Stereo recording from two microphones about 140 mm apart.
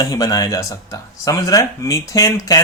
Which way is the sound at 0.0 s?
25° left (ahead or behind).